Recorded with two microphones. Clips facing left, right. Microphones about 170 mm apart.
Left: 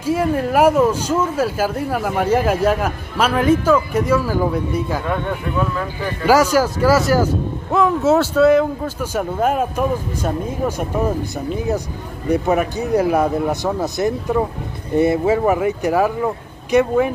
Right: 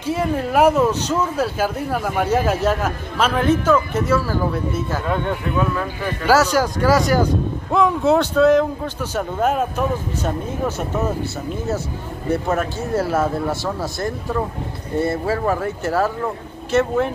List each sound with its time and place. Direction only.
0.0 s speech: 10° left (ahead or behind)
5.1 s speech: centre (ahead or behind)
12.3 s speech: 15° left (ahead or behind)